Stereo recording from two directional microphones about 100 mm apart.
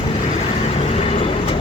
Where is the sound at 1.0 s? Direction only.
70° left (ahead or behind).